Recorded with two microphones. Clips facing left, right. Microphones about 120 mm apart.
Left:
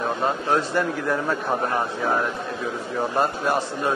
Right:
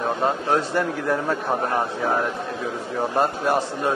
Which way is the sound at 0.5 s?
40° right (ahead or behind).